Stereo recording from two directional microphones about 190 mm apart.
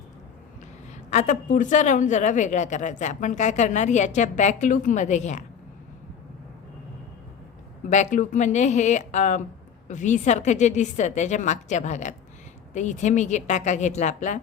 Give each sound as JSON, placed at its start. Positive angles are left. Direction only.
{"t": 1.1, "sound": "a woman's voice", "side_deg": 40}
{"t": 7.9, "sound": "a woman's voice", "side_deg": 40}